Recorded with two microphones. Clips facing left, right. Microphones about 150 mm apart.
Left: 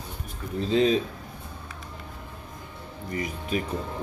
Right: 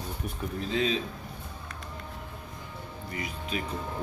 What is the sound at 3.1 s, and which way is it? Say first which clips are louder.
Speech: left 6 dB; 40° left (ahead or behind).